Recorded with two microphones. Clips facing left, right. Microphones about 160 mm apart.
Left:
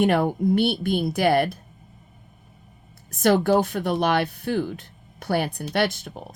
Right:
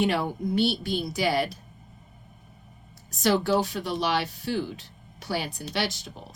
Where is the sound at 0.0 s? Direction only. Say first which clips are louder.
Left 6 dB; 50° left (ahead or behind).